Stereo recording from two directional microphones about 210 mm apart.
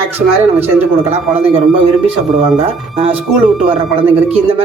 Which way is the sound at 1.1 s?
30° right (ahead or behind).